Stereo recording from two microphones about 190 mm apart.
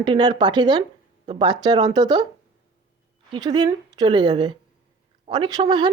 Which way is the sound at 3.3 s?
20° right (ahead or behind).